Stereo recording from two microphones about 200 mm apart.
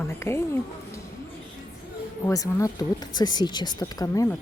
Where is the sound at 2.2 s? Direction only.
15° left (ahead or behind).